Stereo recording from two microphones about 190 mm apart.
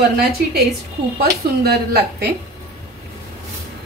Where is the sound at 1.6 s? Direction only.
55° right (ahead or behind).